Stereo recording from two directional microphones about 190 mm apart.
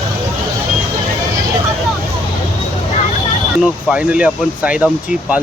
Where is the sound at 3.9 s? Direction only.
5° right (ahead or behind).